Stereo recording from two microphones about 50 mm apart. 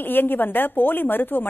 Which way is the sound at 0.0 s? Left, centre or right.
Left.